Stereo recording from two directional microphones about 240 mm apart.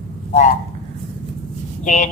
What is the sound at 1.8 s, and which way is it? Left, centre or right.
Speech, left.